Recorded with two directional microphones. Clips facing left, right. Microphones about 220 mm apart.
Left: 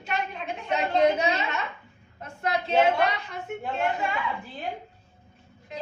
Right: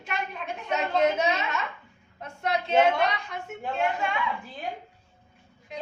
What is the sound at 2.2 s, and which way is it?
A woman's voice, centre (ahead or behind).